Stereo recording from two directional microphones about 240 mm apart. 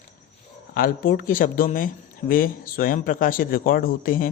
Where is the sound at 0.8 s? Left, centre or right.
Left.